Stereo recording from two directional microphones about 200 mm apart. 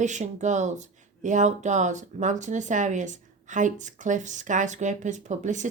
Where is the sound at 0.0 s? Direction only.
35° right (ahead or behind).